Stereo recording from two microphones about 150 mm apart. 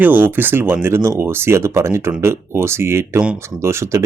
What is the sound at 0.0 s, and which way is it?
Speech, 15° right (ahead or behind).